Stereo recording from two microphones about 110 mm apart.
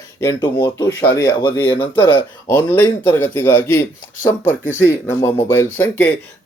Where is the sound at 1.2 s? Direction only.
45° left (ahead or behind).